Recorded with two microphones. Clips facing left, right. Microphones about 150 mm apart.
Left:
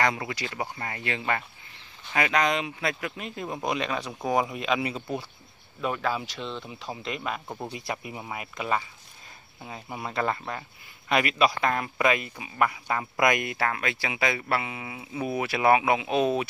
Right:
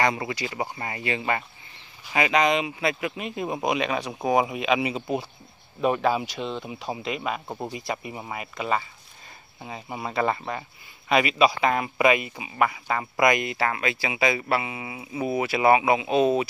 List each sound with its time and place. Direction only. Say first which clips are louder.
0.0 s speech: right 2 dB; 5° right (ahead or behind)
7.0 s speech: right 1 dB; 5° right (ahead or behind)